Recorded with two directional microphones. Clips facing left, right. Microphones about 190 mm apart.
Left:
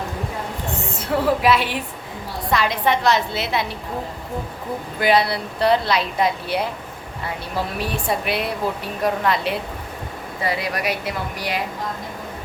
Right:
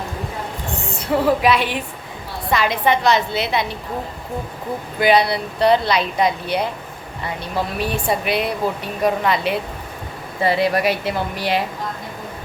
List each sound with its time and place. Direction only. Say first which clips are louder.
1.2 s a woman's voice: right 1 dB; centre (ahead or behind)
4.9 s a woman's voice: right 2 dB; centre (ahead or behind)
7.8 s a woman's voice: right 3 dB; centre (ahead or behind)
10.4 s speech: right 7 dB; 30° right (ahead or behind)